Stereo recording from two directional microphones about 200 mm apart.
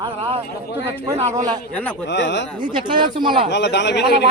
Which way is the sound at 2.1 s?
60° left (ahead or behind).